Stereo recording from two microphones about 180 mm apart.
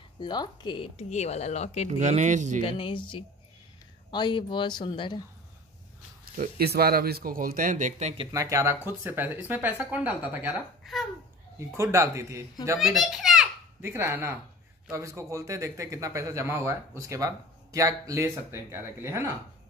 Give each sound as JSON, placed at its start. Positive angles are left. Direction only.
{"t": 0.2, "sound": "speech", "side_deg": 25}
{"t": 1.9, "sound": "speech", "side_deg": -40}
{"t": 2.6, "sound": "speech", "side_deg": 30}
{"t": 6.3, "sound": "speech", "side_deg": -55}
{"t": 8.3, "sound": "a man's voice", "side_deg": -20}
{"t": 11.7, "sound": "a man's voice", "side_deg": -15}
{"t": 12.7, "sound": "a child's voice", "side_deg": 0}
{"t": 13.7, "sound": "a man's voice", "side_deg": -15}